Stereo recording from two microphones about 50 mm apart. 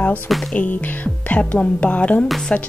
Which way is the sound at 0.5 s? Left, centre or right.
Left.